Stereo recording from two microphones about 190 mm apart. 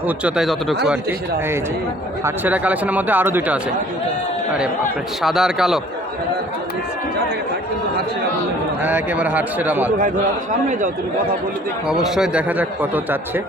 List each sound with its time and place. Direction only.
0.3 s speech: centre (ahead or behind)
2.2 s speech: 10° right (ahead or behind)
5.2 s speech: centre (ahead or behind)
8.8 s speech: 10° right (ahead or behind)
11.9 s speech: centre (ahead or behind)